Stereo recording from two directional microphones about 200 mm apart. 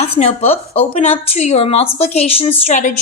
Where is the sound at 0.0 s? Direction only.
30° left (ahead or behind).